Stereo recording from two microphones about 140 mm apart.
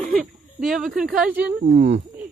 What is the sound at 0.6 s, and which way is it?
Speech, centre (ahead or behind).